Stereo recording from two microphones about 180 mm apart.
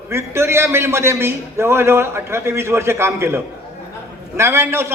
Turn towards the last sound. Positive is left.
turn(degrees=-15)  # may be behind; listen again after turning